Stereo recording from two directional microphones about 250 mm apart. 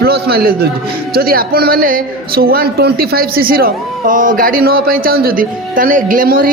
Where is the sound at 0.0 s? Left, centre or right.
Right.